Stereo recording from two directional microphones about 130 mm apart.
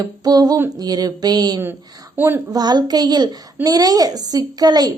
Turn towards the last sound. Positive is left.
turn(degrees=-30)  # may be behind; listen again after turning